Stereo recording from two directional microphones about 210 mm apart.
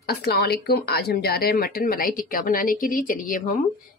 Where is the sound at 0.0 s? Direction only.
50° left (ahead or behind).